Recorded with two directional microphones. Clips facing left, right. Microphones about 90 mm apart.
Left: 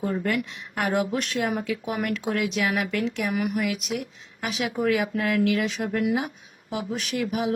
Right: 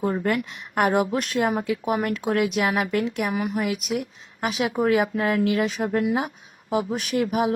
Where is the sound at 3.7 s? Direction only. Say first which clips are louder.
Right 3 dB; 45° right (ahead or behind).